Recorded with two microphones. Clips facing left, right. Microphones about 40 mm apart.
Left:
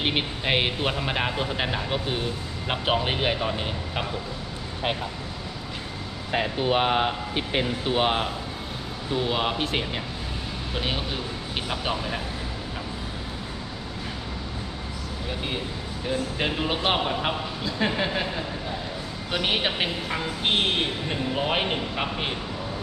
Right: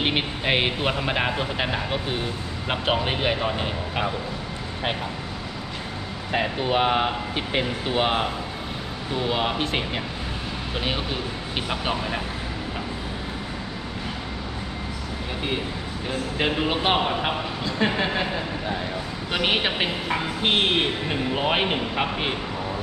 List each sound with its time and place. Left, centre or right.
0.0 s a man's voice: centre
6.3 s a man's voice: centre
16.0 s a man's voice: centre
17.6 s a man's voice: centre